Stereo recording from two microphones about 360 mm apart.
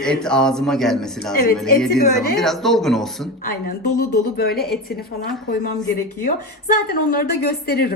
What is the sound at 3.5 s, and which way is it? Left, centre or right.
A woman's voice, left.